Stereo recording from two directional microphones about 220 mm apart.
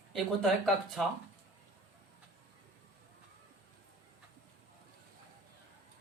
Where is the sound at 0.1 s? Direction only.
Centre (ahead or behind).